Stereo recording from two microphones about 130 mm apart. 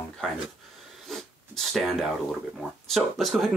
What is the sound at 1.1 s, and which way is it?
Speech, centre (ahead or behind).